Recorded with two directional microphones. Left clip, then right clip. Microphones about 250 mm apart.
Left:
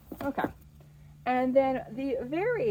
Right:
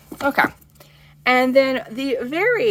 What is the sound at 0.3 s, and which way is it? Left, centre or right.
Speech, right.